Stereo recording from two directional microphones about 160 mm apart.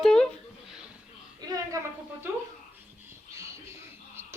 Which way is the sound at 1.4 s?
25° right (ahead or behind).